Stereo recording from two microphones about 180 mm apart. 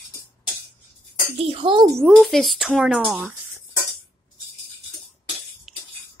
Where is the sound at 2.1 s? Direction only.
Centre (ahead or behind).